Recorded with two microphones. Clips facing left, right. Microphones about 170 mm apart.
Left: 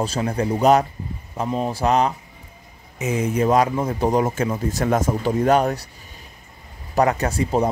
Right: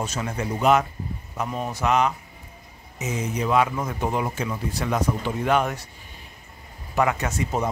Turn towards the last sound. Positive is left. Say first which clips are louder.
# left 5 dB
turn(degrees=30)  # may be behind; listen again after turning